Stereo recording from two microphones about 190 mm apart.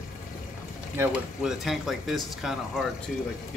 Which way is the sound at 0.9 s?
10° right (ahead or behind).